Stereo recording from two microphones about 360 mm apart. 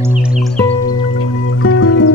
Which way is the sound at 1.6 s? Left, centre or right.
Left.